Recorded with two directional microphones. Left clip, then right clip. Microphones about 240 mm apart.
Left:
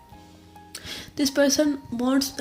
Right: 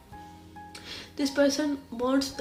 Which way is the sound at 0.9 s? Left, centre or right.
Left.